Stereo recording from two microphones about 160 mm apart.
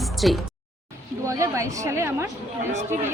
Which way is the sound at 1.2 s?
20° right (ahead or behind).